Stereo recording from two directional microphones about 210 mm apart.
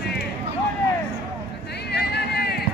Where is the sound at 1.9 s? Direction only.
50° left (ahead or behind).